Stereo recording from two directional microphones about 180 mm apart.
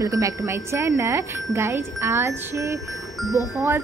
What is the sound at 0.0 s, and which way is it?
Speech, 15° right (ahead or behind).